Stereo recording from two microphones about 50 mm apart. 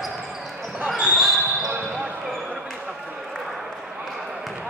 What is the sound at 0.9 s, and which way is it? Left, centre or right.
Basketball bounce, centre.